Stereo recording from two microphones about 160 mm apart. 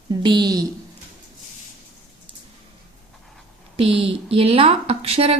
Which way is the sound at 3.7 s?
35° right (ahead or behind).